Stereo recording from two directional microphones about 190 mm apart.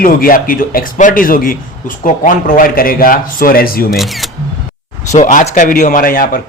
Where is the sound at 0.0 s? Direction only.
50° left (ahead or behind).